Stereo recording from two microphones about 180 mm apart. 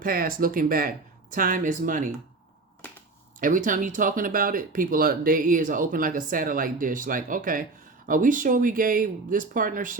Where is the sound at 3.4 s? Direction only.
45° right (ahead or behind).